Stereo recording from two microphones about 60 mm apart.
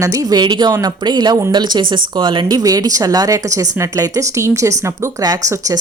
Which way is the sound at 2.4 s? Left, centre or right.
Right.